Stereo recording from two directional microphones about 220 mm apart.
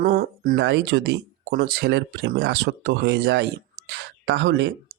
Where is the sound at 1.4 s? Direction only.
40° right (ahead or behind).